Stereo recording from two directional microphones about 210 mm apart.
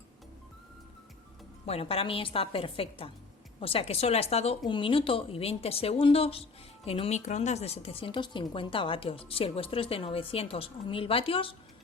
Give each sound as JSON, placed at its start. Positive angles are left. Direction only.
{"t": 1.6, "sound": "a woman's voice", "side_deg": 30}